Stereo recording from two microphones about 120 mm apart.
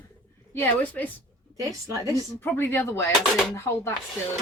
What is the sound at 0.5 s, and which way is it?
Speech, 15° left (ahead or behind).